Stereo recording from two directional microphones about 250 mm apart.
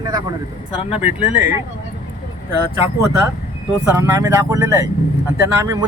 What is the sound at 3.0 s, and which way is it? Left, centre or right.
Speech, centre.